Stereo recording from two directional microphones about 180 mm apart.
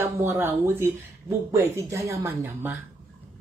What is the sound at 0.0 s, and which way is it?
Speech, 15° right (ahead or behind).